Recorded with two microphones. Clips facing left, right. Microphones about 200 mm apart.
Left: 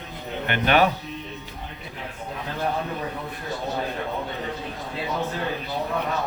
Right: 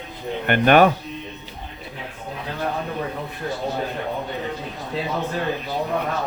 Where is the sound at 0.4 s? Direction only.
50° right (ahead or behind).